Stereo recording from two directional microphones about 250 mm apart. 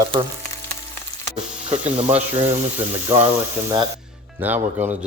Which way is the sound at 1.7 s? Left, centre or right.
Right.